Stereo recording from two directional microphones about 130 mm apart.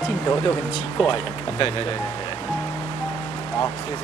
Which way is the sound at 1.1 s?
40° left (ahead or behind).